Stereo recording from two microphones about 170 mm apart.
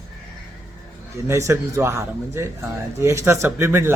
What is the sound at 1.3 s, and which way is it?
Speech, 15° right (ahead or behind).